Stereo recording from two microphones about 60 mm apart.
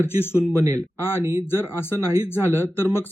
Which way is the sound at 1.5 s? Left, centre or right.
Left.